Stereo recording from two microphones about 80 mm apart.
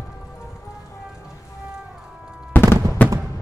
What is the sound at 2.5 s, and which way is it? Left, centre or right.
Music, left.